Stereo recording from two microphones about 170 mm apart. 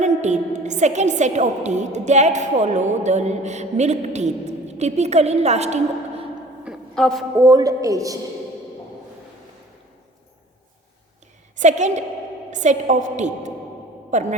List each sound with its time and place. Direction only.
0.0 s a woman's voice: 45° right (ahead or behind)
6.7 s a sound: centre (ahead or behind)
7.3 s speech: 20° right (ahead or behind)
11.5 s a woman's voice: 45° right (ahead or behind)